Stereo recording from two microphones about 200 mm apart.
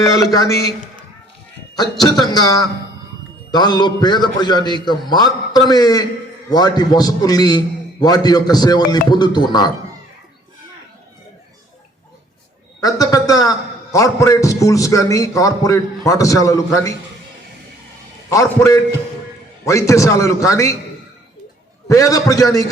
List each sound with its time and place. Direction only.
0.1 s a man's voice: 15° left (ahead or behind)
1.7 s a man's voice: 20° left (ahead or behind)
12.8 s a man's voice: 20° left (ahead or behind)
18.3 s a man's voice: 15° left (ahead or behind)
21.8 s a man's voice: 15° left (ahead or behind)